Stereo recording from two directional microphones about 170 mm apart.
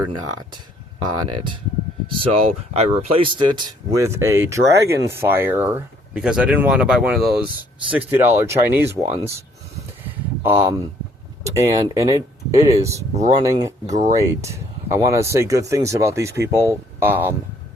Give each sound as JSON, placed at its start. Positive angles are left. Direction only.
{"t": 1.1, "sound": "speech", "side_deg": -25}
{"t": 10.4, "sound": "speech", "side_deg": -10}